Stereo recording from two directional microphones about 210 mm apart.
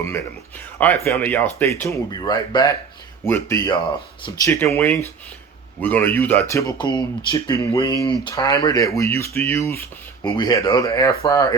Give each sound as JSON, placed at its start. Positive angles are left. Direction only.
{"t": 1.0, "sound": "speech", "side_deg": 10}